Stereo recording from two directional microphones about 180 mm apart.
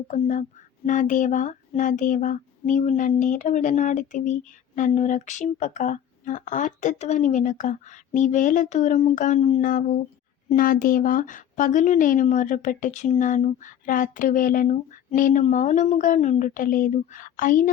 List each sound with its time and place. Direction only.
0.1 s child singing: 45° left (ahead or behind)